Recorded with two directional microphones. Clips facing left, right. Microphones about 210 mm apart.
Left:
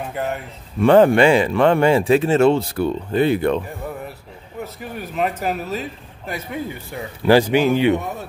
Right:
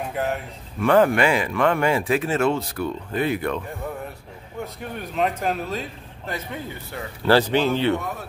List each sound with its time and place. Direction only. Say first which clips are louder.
0.0 s speech: left 1 dB; centre (ahead or behind)
0.7 s speech: left 5 dB; 30° left (ahead or behind)
4.6 s a man's voice: left 2 dB; 5° left (ahead or behind)